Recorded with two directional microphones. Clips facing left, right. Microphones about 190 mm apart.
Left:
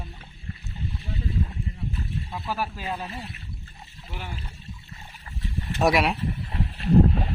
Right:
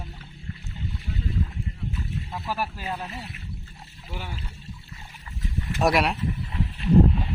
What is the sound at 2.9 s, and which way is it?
Speech, 5° left (ahead or behind).